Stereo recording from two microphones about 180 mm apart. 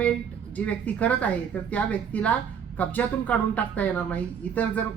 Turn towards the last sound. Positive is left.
turn(degrees=10)  # may be behind; listen again after turning